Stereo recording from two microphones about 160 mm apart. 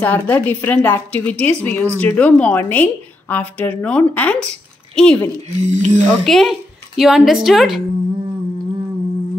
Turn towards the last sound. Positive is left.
turn(degrees=0)  # may be behind; listen again after turning